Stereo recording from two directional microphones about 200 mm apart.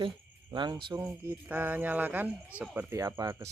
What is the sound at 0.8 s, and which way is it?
Speech, 15° right (ahead or behind).